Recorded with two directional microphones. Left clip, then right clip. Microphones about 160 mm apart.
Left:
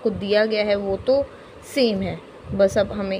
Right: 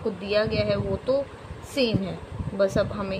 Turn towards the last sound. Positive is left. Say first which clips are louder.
# left 5 dB
turn(degrees=35)  # may be behind; listen again after turning